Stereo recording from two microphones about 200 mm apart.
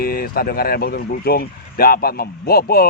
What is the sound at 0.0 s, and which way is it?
Speech, 50° left (ahead or behind).